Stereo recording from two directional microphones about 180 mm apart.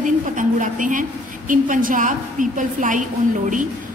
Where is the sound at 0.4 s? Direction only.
45° right (ahead or behind).